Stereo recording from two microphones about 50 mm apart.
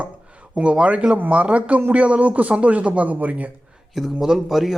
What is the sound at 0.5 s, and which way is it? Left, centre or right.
Speech, right.